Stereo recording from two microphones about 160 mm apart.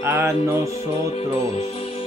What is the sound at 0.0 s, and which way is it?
Speech, 15° right (ahead or behind).